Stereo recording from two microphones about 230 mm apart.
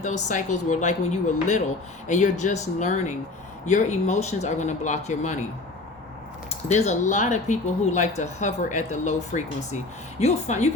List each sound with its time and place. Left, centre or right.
0.0 s speech: left
6.5 s speech: left